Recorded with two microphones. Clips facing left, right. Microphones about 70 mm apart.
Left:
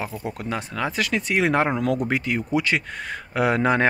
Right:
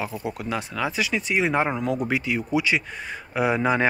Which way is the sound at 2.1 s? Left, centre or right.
Left.